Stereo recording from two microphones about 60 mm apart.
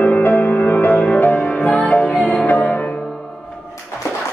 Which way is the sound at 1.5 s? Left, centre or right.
Centre.